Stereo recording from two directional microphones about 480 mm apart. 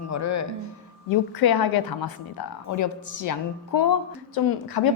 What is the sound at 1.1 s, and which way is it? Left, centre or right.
A woman's voice, left.